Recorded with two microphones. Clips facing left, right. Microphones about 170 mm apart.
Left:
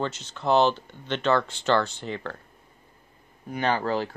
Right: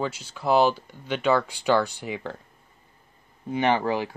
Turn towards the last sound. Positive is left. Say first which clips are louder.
# right 2 dB
turn(degrees=-15)  # may be behind; listen again after turning